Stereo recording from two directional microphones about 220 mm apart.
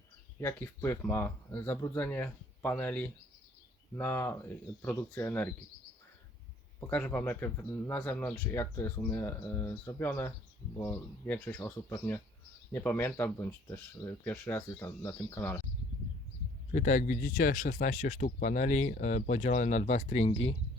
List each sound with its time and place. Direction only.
0.3 s speech: 10° left (ahead or behind)
6.7 s speech: 10° left (ahead or behind)
16.7 s speech: 35° left (ahead or behind)